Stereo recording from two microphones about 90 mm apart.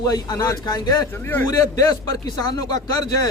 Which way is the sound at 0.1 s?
40° left (ahead or behind).